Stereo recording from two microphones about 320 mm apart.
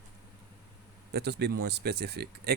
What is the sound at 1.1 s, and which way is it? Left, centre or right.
Speech, right.